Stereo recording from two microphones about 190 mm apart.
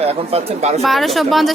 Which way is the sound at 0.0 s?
35° right (ahead or behind).